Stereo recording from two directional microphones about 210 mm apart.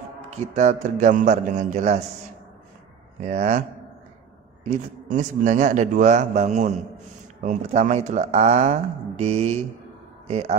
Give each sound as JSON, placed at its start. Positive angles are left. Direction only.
{"t": 0.6, "sound": "a man's voice", "side_deg": -35}
{"t": 3.2, "sound": "a man's voice", "side_deg": -35}
{"t": 4.6, "sound": "a man's voice", "side_deg": -35}